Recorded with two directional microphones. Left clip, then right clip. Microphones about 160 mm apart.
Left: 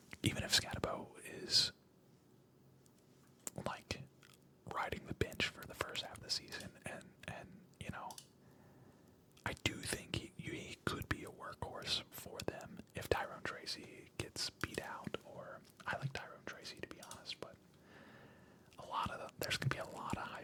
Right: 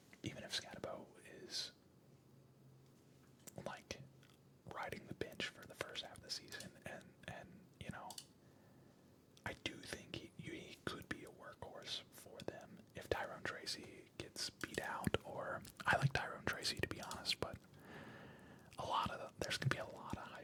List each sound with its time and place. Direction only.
0.1 s whispering: 40° left (ahead or behind)
3.4 s whispering: 20° left (ahead or behind)
9.6 s whispering: 30° left (ahead or behind); by 14.9 s 10° left (ahead or behind)
14.9 s whispering: 15° right (ahead or behind); by 20.4 s 15° left (ahead or behind)